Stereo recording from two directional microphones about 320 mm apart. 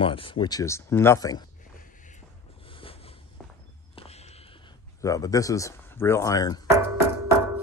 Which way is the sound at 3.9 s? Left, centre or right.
Centre.